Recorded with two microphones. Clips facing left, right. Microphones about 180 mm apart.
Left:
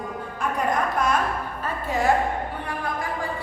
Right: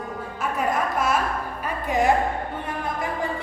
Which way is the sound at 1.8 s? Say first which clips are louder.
Right 3 dB; 15° right (ahead or behind).